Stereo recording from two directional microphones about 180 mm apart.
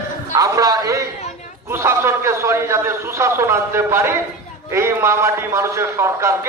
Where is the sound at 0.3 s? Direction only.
20° right (ahead or behind).